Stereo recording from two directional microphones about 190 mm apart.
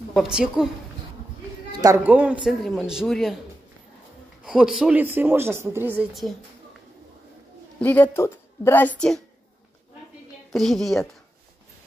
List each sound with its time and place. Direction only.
0.1 s speech: 5° right (ahead or behind)
1.7 s a sound: 20° right (ahead or behind)
2.0 s speech: 5° right (ahead or behind)
4.7 s speech: 5° right (ahead or behind)
7.8 s a woman's voice: 10° left (ahead or behind)
10.5 s speech: centre (ahead or behind)